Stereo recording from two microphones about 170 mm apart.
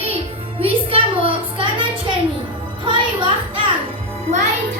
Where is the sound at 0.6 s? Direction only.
30° right (ahead or behind).